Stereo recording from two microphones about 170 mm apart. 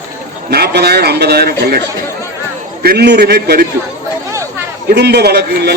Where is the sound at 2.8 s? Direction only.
75° right (ahead or behind).